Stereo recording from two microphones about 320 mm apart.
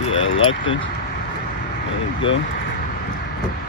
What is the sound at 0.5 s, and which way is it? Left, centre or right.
Speech, left.